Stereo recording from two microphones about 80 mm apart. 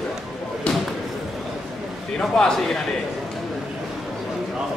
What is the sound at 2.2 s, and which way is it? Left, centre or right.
Speech, centre.